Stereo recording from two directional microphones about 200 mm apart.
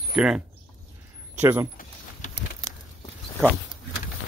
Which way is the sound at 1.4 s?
10° right (ahead or behind).